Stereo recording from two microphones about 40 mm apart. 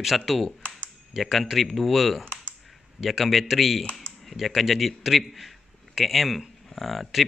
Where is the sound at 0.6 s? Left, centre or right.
Left.